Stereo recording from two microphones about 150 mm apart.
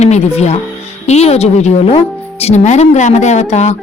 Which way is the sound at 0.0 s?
50° left (ahead or behind).